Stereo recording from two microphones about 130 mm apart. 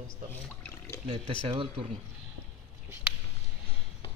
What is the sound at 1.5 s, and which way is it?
Speech, 40° right (ahead or behind).